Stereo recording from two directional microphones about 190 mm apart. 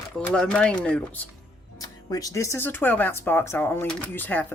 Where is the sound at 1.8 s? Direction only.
20° left (ahead or behind).